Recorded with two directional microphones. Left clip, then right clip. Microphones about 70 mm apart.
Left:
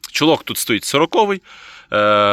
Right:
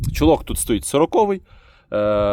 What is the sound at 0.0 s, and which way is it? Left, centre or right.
Speech, right.